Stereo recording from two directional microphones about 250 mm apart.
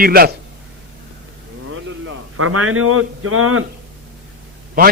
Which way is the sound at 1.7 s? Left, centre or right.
Right.